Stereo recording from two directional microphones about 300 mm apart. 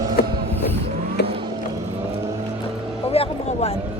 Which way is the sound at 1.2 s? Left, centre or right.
Left.